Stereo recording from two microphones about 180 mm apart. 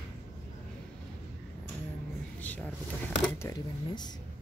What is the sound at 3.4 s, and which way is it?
Speech, 20° left (ahead or behind).